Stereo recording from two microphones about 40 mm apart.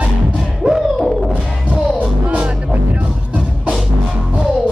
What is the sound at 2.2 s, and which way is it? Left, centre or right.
Music, right.